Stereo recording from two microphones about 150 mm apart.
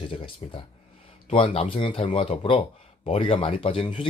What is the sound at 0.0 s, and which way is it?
A man's voice, 35° left (ahead or behind).